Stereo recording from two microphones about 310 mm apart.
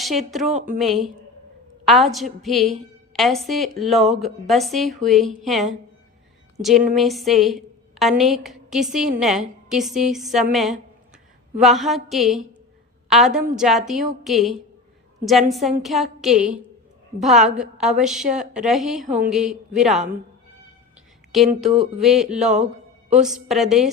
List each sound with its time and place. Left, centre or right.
0.0 s speech: centre
0.5 s a woman's voice: right
0.8 s a woman's voice: centre
21.3 s speech: centre